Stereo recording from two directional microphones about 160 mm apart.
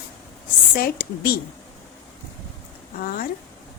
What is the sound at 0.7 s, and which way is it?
Speech, 70° left (ahead or behind).